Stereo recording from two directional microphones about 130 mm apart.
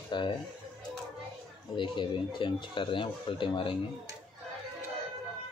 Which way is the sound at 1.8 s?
40° left (ahead or behind).